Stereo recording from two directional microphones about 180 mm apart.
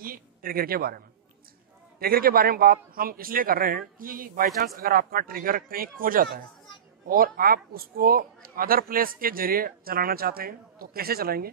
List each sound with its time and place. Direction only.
0.0 s a woman's voice: 50° right (ahead or behind)